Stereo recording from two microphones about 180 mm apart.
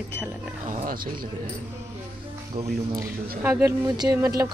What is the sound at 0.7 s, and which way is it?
Speech, 45° right (ahead or behind).